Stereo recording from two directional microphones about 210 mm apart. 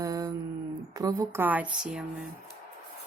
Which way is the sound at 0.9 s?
15° right (ahead or behind).